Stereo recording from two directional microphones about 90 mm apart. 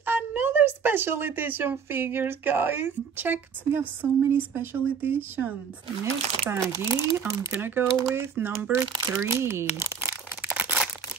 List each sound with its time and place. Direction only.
0.0 s speech: 20° right (ahead or behind)
6.6 s speech: 35° right (ahead or behind)
7.3 s speech: 20° right (ahead or behind)
9.2 s crumpling: 25° right (ahead or behind)